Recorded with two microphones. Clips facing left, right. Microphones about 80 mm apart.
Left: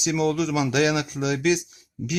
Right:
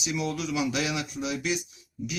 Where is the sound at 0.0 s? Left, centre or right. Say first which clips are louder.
Left 8 dB; left.